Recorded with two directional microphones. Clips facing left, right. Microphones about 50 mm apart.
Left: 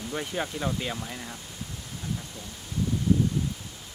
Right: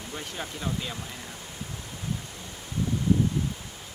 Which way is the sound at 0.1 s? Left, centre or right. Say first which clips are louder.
Left 5 dB; centre.